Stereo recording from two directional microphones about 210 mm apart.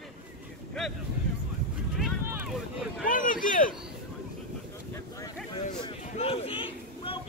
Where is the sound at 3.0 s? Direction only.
40° left (ahead or behind).